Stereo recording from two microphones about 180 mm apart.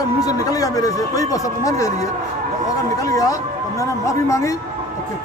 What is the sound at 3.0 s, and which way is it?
Speech, 20° left (ahead or behind).